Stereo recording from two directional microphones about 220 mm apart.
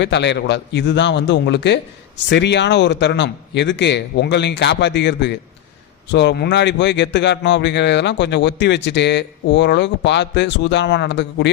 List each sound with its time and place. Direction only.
0.0 s a man's voice: 50° left (ahead or behind)